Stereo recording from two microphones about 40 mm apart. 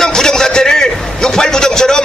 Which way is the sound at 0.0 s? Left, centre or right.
Centre.